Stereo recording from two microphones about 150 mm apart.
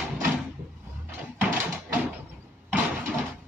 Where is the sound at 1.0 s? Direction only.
15° right (ahead or behind).